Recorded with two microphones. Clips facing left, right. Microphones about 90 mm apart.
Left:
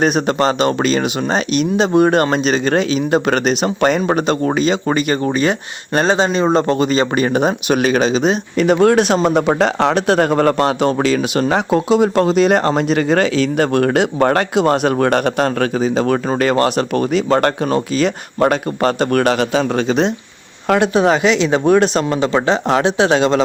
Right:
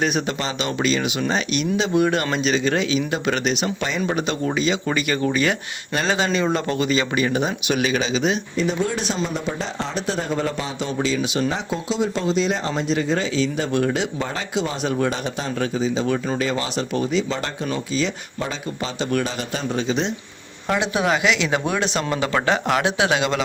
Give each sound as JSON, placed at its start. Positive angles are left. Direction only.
{"t": 0.0, "sound": "speech", "side_deg": 45}
{"t": 8.5, "sound": "speech", "side_deg": 70}
{"t": 20.7, "sound": "speech", "side_deg": 50}
{"t": 20.9, "sound": "speech", "side_deg": 35}